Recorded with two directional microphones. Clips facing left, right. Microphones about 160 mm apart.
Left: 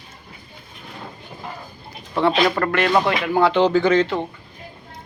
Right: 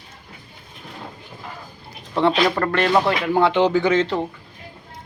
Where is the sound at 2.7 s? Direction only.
Centre (ahead or behind).